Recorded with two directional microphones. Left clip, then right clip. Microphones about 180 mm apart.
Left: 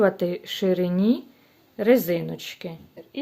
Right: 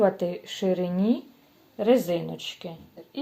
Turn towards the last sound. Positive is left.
turn(degrees=45)  # may be behind; listen again after turning